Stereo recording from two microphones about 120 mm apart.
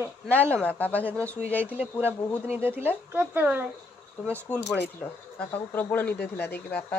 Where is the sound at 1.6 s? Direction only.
15° right (ahead or behind).